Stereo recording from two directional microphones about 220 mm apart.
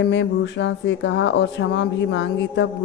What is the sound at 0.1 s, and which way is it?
A man's voice, 55° left (ahead or behind).